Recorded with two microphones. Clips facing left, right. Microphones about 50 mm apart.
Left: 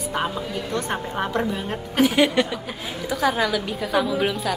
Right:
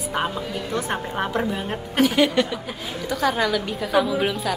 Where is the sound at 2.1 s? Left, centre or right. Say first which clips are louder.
Even; centre.